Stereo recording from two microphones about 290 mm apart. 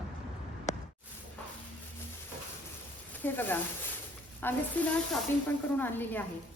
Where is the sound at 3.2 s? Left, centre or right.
Centre.